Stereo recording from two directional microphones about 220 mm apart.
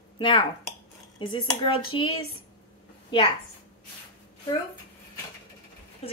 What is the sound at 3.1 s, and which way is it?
Speech, 20° left (ahead or behind).